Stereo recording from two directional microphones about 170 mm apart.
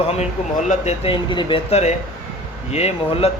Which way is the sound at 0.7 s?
35° left (ahead or behind).